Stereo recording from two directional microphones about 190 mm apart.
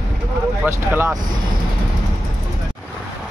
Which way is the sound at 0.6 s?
15° right (ahead or behind).